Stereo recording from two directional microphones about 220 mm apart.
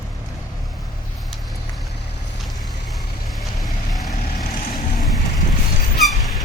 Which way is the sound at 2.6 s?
Centre (ahead or behind).